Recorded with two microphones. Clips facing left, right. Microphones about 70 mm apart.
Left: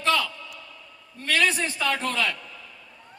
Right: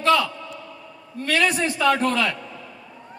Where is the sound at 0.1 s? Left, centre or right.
Right.